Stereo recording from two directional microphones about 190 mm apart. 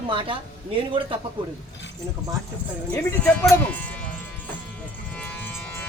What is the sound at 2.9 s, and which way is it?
Speech, 5° left (ahead or behind).